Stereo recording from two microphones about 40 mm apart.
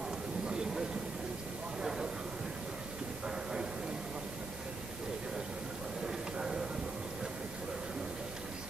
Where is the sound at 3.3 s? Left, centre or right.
Centre.